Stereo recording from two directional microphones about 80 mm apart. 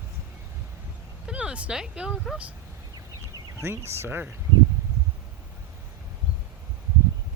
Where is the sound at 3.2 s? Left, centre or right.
Right.